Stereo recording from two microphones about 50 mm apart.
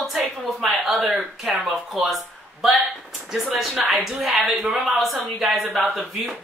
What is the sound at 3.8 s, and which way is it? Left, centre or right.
Speech, centre.